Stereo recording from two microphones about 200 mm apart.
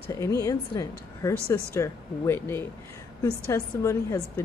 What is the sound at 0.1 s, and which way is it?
A woman's voice, 15° left (ahead or behind).